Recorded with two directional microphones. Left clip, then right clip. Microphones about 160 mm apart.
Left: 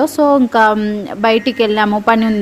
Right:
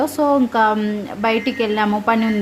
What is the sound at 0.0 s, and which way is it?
A woman's voice, 40° left (ahead or behind).